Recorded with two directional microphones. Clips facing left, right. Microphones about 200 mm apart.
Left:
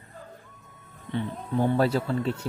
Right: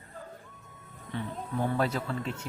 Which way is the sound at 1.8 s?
35° left (ahead or behind).